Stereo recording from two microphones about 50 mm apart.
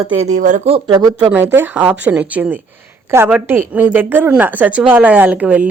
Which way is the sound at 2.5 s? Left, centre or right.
Right.